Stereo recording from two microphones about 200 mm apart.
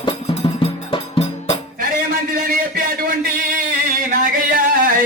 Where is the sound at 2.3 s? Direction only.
45° right (ahead or behind).